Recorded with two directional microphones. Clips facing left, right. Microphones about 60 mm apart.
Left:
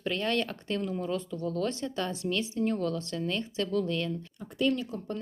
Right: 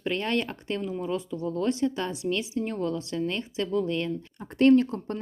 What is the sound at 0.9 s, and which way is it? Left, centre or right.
Speech, centre.